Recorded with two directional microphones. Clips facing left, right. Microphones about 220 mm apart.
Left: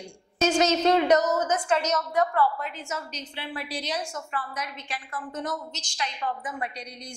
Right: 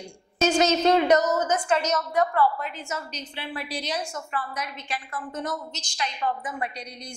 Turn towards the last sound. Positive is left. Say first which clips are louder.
# right 2 dB
turn(degrees=-15)  # may be behind; listen again after turning